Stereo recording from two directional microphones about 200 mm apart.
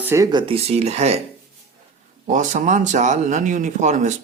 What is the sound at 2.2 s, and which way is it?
Speech, 40° right (ahead or behind).